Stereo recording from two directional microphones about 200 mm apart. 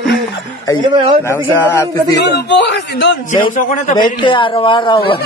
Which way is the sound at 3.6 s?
40° left (ahead or behind).